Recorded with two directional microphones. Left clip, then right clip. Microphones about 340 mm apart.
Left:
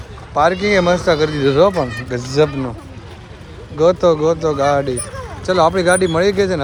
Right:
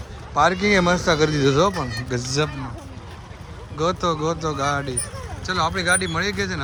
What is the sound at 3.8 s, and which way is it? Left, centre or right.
Speech, centre.